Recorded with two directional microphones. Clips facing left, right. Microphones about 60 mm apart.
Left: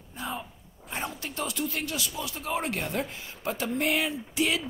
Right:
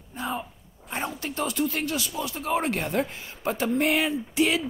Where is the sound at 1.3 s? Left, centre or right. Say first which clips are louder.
Right 6 dB; right.